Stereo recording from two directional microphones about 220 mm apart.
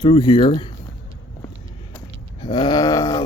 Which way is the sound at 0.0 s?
20° left (ahead or behind).